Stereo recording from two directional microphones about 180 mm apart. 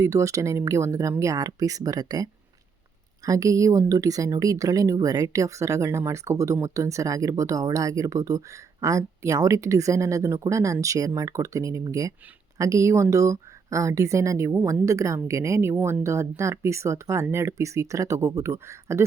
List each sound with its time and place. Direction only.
0.0 s a woman's voice: 15° right (ahead or behind)